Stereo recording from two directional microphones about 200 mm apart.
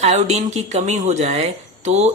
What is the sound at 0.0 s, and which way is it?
Speech, 35° right (ahead or behind).